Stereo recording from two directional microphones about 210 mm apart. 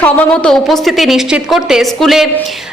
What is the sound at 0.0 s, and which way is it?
A woman's voice, 5° left (ahead or behind).